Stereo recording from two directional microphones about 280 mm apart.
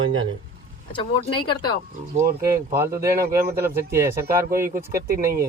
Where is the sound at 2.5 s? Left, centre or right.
Centre.